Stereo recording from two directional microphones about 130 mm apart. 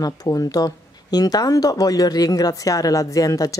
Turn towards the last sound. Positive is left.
turn(degrees=25)  # may be behind; listen again after turning